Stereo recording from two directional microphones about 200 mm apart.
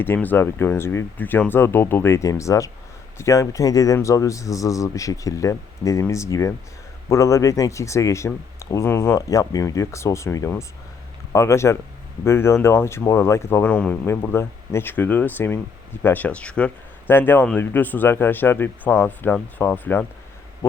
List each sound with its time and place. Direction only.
0.0 s speech: 10° left (ahead or behind)